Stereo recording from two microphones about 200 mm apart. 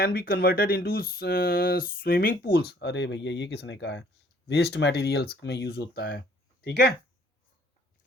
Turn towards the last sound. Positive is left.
turn(degrees=55)  # may be behind; listen again after turning